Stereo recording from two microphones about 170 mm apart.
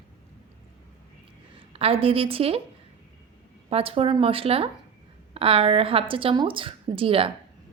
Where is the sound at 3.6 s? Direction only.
35° right (ahead or behind).